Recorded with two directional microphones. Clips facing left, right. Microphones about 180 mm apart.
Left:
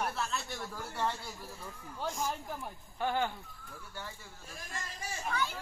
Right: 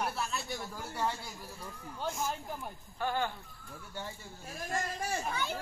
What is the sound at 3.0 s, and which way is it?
Speech, 20° left (ahead or behind).